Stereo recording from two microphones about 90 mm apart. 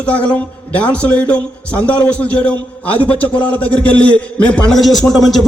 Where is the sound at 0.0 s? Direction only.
15° left (ahead or behind).